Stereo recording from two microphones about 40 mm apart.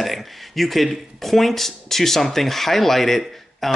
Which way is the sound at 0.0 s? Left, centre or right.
Centre.